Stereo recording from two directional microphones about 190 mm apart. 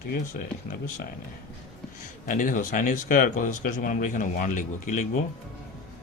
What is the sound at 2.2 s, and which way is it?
Speech, 45° left (ahead or behind).